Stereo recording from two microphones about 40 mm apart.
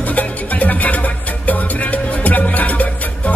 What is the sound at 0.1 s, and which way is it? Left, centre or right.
Music, left.